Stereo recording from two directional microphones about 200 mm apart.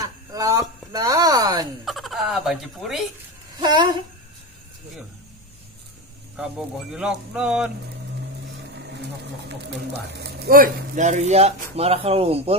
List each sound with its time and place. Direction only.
0.0 s a sound: 15° right (ahead or behind)
1.9 s speech: centre (ahead or behind)
3.5 s a woman's voice: 20° right (ahead or behind)
6.3 s speech: 5° right (ahead or behind)
8.5 s a sound: 60° right (ahead or behind)
9.6 s speech: 55° right (ahead or behind); by 12.5 s 30° right (ahead or behind)